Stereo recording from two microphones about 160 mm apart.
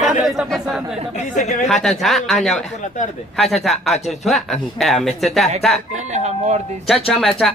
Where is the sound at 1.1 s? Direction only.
45° left (ahead or behind).